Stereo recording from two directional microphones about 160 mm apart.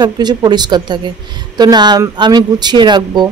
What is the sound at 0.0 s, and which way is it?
Speech, 25° right (ahead or behind).